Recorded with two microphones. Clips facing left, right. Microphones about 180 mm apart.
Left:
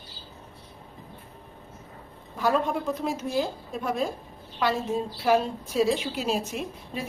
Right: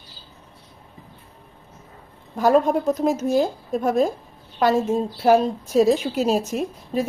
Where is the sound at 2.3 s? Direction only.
45° right (ahead or behind).